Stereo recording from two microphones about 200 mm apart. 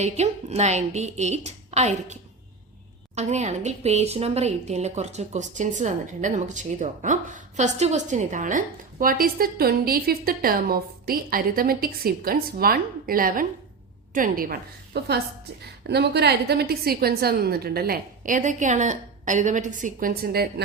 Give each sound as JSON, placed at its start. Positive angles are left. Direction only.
{"t": 0.0, "sound": "a woman's voice", "side_deg": -35}
{"t": 3.2, "sound": "a woman's voice", "side_deg": -35}